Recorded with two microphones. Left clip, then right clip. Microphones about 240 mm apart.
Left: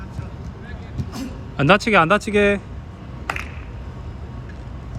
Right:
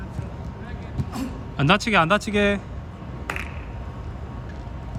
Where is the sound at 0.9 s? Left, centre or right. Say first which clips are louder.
Right 1 dB; centre.